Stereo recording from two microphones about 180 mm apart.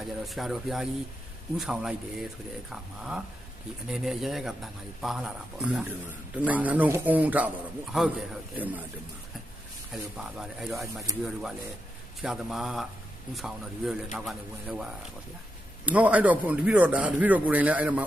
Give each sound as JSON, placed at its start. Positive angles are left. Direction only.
{"t": 0.0, "sound": "speech", "side_deg": 0}
{"t": 8.5, "sound": "speech", "side_deg": -10}
{"t": 9.9, "sound": "speech", "side_deg": 0}
{"t": 12.2, "sound": "speech", "side_deg": 0}
{"t": 15.9, "sound": "speech", "side_deg": -10}